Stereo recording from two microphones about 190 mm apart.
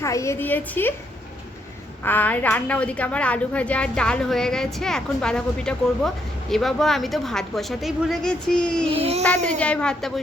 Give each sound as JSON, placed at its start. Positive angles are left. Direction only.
{"t": 0.0, "sound": "a woman's voice", "side_deg": 15}
{"t": 2.0, "sound": "a woman's voice", "side_deg": 10}
{"t": 8.9, "sound": "a sound", "side_deg": -30}
{"t": 9.2, "sound": "a woman's voice", "side_deg": 5}